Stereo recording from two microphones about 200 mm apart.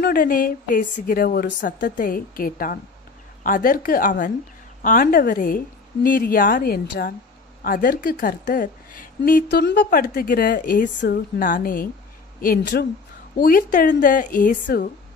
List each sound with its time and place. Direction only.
0.0 s a woman's voice: 45° left (ahead or behind)
14.0 s a woman's voice: 40° left (ahead or behind)